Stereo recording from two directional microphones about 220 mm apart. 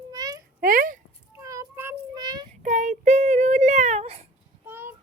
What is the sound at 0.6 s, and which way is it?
Speech, 40° right (ahead or behind).